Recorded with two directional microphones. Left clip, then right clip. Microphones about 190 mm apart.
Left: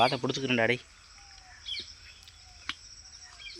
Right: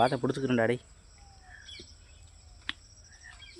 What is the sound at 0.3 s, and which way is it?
Speech, 30° right (ahead or behind).